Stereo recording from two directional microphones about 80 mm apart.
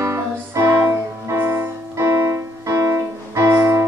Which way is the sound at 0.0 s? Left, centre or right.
Right.